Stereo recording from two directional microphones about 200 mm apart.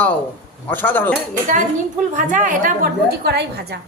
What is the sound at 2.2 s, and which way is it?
A woman's voice, 40° right (ahead or behind).